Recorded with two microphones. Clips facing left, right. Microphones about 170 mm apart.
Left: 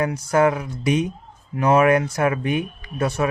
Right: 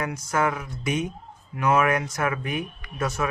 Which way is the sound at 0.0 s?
30° left (ahead or behind).